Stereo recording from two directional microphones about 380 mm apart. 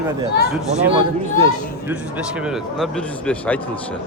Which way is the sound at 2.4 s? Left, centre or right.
Centre.